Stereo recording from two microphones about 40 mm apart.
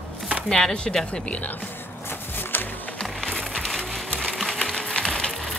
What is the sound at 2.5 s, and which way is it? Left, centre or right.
Music, left.